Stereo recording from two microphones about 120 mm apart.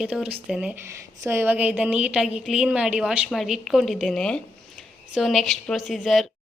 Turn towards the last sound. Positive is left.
turn(degrees=0)  # may be behind; listen again after turning